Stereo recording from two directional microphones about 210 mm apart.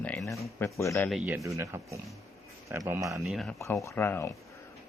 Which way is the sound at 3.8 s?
10° left (ahead or behind).